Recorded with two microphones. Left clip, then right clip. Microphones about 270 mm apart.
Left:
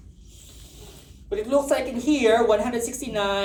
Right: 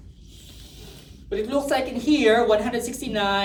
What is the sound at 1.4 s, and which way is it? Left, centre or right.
A woman's voice, centre.